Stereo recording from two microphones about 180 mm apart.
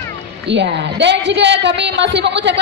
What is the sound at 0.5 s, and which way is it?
A woman's voice, 75° right (ahead or behind).